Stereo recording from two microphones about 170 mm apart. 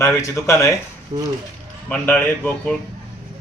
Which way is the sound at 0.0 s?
15° left (ahead or behind).